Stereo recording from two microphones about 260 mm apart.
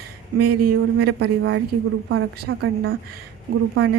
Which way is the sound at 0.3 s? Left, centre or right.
Right.